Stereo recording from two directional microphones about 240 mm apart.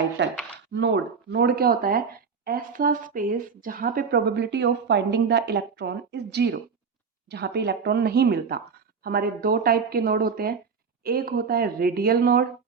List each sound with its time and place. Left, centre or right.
0.2 s speech: right